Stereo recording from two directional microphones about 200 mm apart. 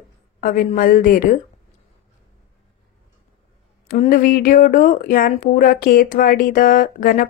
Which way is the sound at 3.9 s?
45° left (ahead or behind).